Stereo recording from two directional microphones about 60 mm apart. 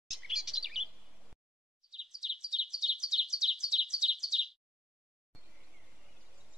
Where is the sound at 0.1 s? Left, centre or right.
Centre.